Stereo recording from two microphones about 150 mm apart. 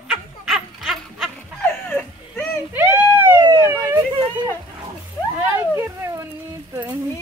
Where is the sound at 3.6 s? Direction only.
15° right (ahead or behind).